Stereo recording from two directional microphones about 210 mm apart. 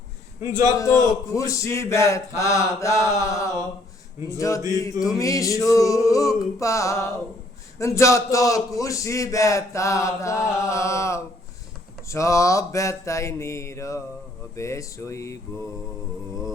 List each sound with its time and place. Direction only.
0.8 s a man's voice: 15° left (ahead or behind)